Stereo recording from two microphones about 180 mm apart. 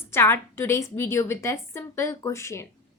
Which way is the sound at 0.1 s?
15° left (ahead or behind).